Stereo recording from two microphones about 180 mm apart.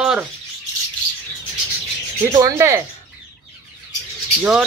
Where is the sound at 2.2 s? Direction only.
20° right (ahead or behind).